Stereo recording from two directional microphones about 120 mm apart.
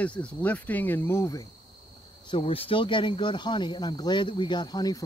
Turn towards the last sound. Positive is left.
turn(degrees=35)  # may be behind; listen again after turning